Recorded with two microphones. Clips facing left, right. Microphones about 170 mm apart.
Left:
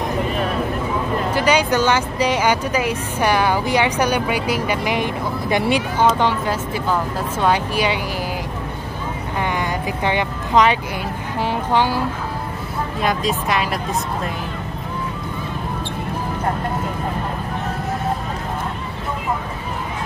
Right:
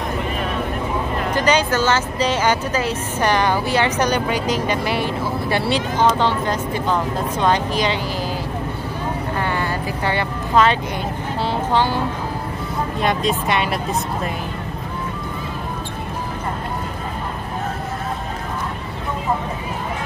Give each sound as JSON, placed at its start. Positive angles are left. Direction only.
{"t": 1.3, "sound": "speech", "side_deg": 10}
{"t": 10.0, "sound": "speech", "side_deg": 15}
{"t": 13.0, "sound": "speech", "side_deg": 0}